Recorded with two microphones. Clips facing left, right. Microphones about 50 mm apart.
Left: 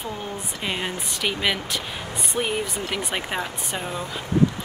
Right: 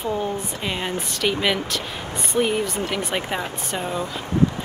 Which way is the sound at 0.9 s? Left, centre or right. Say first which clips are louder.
Right 3 dB; left.